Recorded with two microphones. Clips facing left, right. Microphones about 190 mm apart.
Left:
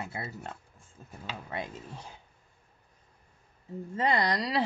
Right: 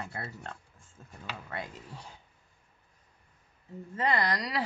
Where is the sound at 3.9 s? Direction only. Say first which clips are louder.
Left 2 dB; 25° left (ahead or behind).